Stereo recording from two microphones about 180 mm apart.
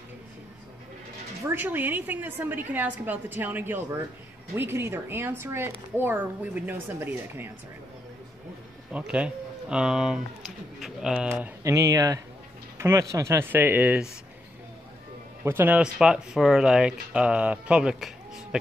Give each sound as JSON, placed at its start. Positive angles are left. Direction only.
{"t": 1.4, "sound": "a woman's voice", "side_deg": -10}
{"t": 8.9, "sound": "a woman's voice", "side_deg": -5}
{"t": 12.7, "sound": "a sound", "side_deg": -15}
{"t": 13.1, "sound": "a woman's voice", "side_deg": -15}
{"t": 15.4, "sound": "speech", "side_deg": -10}